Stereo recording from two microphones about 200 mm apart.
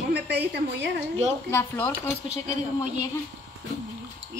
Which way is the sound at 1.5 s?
10° left (ahead or behind).